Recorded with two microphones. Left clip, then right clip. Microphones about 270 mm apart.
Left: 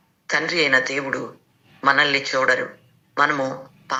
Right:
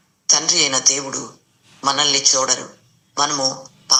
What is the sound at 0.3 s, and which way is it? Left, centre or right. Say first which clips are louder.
A man's voice: right 2 dB; centre.